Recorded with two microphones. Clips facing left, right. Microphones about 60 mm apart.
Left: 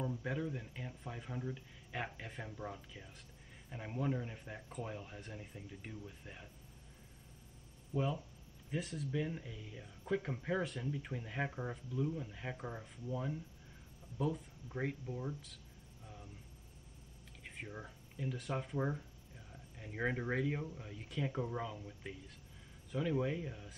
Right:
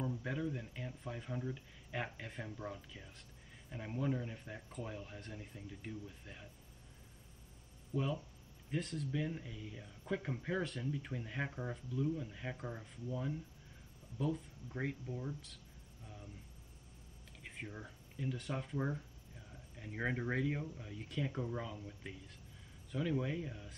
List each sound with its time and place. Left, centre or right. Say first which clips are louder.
0.0 s speech: even; centre
8.6 s speech: right 1 dB; centre
17.4 s speech: even; centre